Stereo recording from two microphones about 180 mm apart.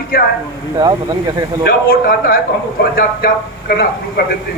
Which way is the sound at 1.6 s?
55° left (ahead or behind).